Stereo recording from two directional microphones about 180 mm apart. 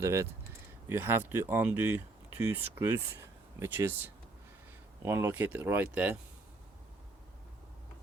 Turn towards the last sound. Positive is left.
turn(degrees=-10)  # may be behind; listen again after turning